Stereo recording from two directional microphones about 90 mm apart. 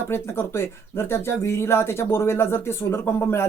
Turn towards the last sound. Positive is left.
turn(degrees=30)  # may be behind; listen again after turning